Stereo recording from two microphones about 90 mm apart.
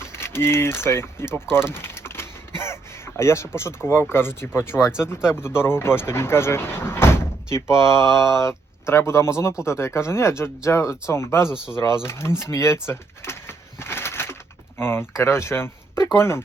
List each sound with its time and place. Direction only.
0.2 s speech: 30° left (ahead or behind)
1.6 s typing: 25° left (ahead or behind)
3.2 s speech: 30° left (ahead or behind)
11.4 s speech: 10° right (ahead or behind)
12.4 s speech: 30° left (ahead or behind)
12.9 s a sound: 30° left (ahead or behind)
14.8 s speech: 25° left (ahead or behind)